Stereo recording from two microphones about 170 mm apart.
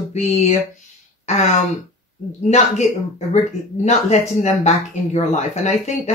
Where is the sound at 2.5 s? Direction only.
40° left (ahead or behind).